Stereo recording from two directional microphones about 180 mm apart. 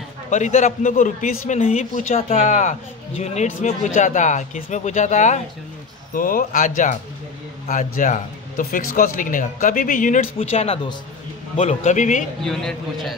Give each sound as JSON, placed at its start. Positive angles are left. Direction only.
{"t": 0.3, "sound": "speech", "side_deg": 40}
{"t": 10.3, "sound": "a man's voice", "side_deg": 35}
{"t": 12.4, "sound": "a man's voice", "side_deg": 0}